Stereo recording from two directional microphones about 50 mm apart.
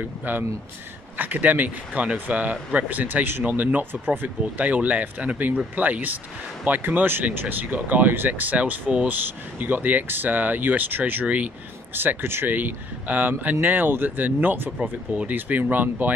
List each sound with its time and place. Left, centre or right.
0.0 s speech: right
11.9 s speech: right
12.5 s speech: right
14.8 s speech: right
15.3 s speech: right